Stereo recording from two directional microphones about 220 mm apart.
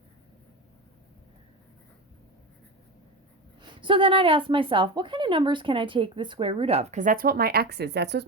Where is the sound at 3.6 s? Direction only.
20° right (ahead or behind).